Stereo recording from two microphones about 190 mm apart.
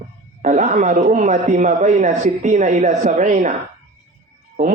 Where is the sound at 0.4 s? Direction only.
40° right (ahead or behind).